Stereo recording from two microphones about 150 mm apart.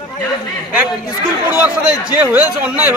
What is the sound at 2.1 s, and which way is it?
Speech, 10° right (ahead or behind).